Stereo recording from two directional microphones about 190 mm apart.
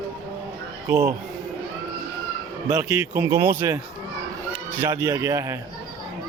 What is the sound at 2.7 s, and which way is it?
Speech, 15° right (ahead or behind).